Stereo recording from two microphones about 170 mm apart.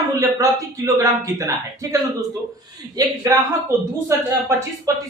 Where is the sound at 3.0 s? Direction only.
20° right (ahead or behind).